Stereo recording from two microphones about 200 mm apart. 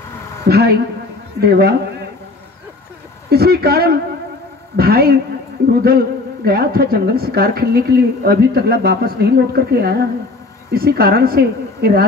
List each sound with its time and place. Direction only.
0.5 s a sound: 50° right (ahead or behind)
1.4 s a woman's voice: 50° right (ahead or behind)
3.3 s a woman's voice: 50° right (ahead or behind)